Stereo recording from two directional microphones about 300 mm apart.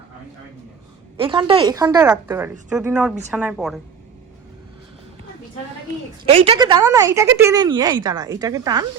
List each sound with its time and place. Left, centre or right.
1.2 s a woman's voice: centre
6.2 s speech: centre